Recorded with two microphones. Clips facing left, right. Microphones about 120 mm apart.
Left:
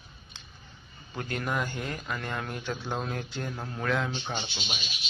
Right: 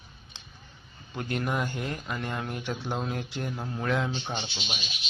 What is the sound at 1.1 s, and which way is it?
A man's voice, 20° right (ahead or behind).